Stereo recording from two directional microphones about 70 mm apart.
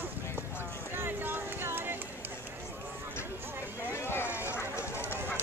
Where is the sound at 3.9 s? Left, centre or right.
Left.